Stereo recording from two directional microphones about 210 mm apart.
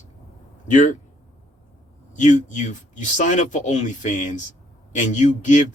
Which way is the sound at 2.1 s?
35° left (ahead or behind).